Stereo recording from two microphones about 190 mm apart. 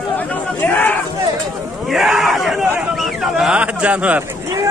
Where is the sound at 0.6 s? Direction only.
10° left (ahead or behind).